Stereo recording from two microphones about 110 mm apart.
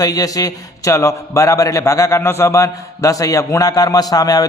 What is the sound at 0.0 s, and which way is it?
A man's voice, 35° left (ahead or behind).